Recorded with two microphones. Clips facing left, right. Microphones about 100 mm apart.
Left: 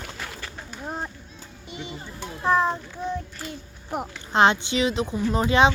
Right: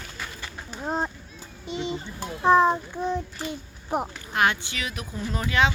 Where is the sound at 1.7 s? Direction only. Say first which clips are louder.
Right 7 dB; 25° right (ahead or behind).